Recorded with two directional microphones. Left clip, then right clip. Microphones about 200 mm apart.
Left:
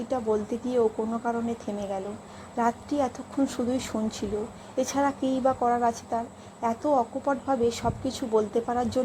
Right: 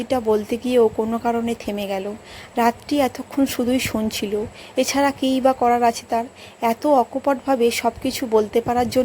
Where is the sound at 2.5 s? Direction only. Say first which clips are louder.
Right 7 dB; 40° right (ahead or behind).